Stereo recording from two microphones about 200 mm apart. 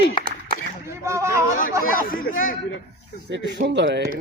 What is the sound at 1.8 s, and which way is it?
Speech, 45° left (ahead or behind).